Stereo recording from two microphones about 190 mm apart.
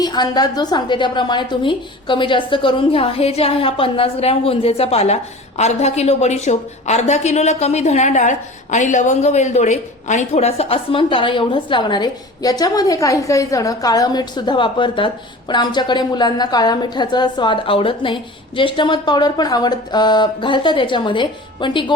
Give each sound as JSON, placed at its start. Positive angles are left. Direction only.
{"t": 0.0, "sound": "a woman's voice", "side_deg": 20}